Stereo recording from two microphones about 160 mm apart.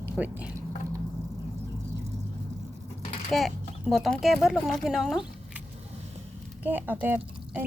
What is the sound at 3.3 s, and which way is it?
Speech, centre (ahead or behind).